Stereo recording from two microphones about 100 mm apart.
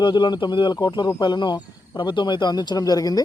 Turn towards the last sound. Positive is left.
turn(degrees=40)  # may be behind; listen again after turning